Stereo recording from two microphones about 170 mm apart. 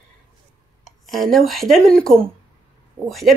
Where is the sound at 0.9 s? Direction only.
Centre (ahead or behind).